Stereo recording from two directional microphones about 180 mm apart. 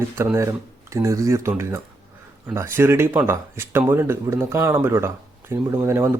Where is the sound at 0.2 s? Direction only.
15° right (ahead or behind).